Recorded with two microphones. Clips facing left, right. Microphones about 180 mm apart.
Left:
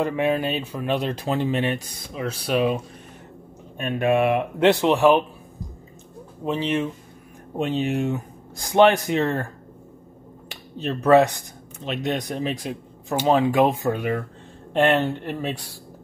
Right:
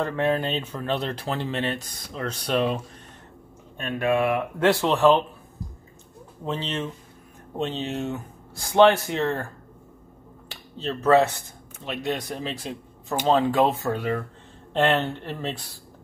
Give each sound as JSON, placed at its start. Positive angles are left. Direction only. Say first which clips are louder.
{"t": 0.0, "sound": "speech", "louder": "left 2 dB", "side_deg": 10}
{"t": 3.7, "sound": "speech", "louder": "left 3 dB", "side_deg": 20}
{"t": 6.4, "sound": "speech", "louder": "left 5 dB", "side_deg": 15}
{"t": 10.5, "sound": "speech", "louder": "left 2 dB", "side_deg": 15}